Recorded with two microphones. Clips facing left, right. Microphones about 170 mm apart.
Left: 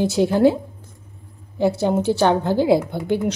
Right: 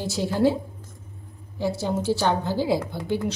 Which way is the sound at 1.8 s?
60° left (ahead or behind).